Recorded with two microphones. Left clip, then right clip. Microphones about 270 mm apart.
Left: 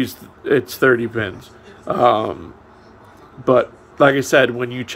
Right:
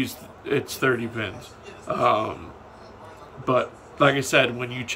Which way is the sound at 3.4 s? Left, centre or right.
Centre.